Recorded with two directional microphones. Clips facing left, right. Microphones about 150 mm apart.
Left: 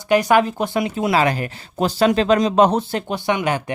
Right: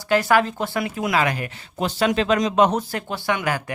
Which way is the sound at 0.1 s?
20° left (ahead or behind).